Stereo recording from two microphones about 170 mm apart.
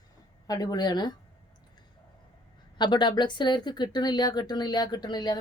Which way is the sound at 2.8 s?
25° left (ahead or behind).